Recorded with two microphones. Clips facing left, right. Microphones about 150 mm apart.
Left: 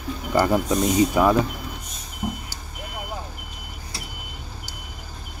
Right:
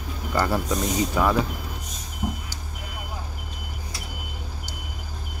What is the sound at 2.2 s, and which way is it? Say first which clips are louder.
Vehicle: left 1 dB; centre (ahead or behind).